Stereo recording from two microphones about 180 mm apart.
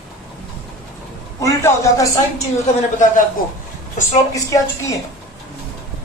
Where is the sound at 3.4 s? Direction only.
50° left (ahead or behind).